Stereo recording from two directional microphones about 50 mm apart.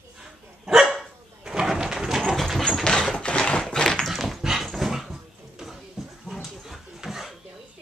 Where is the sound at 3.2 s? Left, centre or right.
Left.